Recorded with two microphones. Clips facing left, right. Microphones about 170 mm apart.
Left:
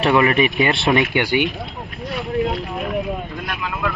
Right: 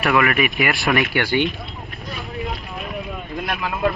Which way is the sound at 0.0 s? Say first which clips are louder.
Left 3 dB; 30° left (ahead or behind).